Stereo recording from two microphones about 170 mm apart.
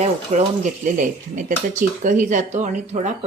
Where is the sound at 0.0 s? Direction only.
45° right (ahead or behind).